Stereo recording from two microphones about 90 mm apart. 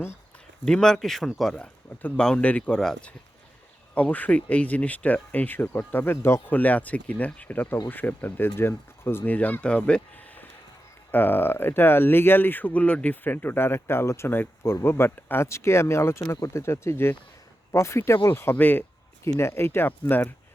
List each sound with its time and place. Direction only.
0.6 s speech: 5° left (ahead or behind)
3.9 s speech: 15° left (ahead or behind)
19.2 s speech: 30° left (ahead or behind)